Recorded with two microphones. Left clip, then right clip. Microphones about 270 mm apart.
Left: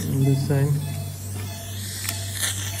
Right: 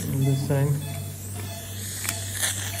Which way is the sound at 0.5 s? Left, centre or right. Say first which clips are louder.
Right 1 dB; right.